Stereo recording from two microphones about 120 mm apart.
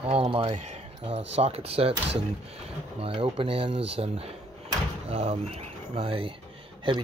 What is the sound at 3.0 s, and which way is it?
Speech, 50° right (ahead or behind).